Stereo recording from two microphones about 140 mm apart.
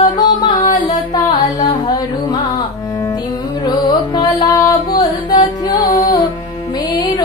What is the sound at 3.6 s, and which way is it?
Music, 30° left (ahead or behind).